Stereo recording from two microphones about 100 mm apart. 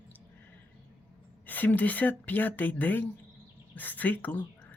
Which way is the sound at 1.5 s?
15° left (ahead or behind).